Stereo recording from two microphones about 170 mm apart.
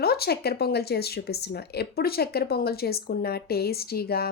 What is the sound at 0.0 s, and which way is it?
Speech, 70° left (ahead or behind).